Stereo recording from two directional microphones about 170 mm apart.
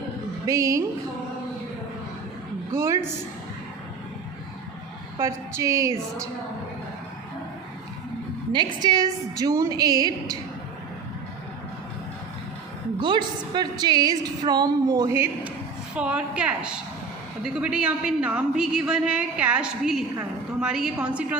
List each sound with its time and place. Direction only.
0.4 s a woman's voice: 20° right (ahead or behind)
2.7 s a woman's voice: 15° right (ahead or behind)
5.1 s a woman's voice: 15° right (ahead or behind)
8.5 s a woman's voice: 25° right (ahead or behind)
13.0 s a woman's voice: 25° right (ahead or behind); by 21.3 s 5° right (ahead or behind)